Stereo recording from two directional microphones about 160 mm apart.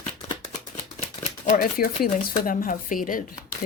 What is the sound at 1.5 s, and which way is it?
Speech, 60° left (ahead or behind).